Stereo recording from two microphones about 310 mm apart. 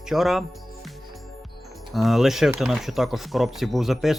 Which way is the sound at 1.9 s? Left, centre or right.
Centre.